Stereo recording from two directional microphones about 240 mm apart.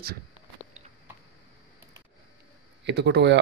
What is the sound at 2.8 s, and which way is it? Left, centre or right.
Speech, right.